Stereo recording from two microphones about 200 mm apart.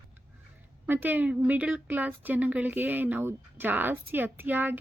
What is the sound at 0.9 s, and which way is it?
A woman's voice, 10° right (ahead or behind).